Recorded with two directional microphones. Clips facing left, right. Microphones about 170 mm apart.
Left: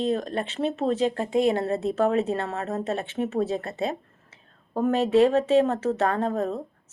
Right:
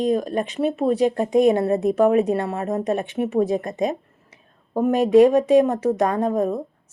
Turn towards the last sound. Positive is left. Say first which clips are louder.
# right 5 dB
turn(degrees=-10)  # may be behind; listen again after turning